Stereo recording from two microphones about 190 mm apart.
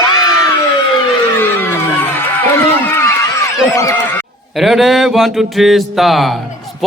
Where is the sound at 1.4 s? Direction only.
10° left (ahead or behind).